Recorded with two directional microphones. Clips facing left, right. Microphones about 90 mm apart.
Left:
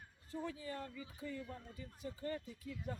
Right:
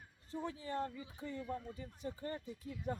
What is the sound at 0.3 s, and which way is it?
Speech, 25° right (ahead or behind).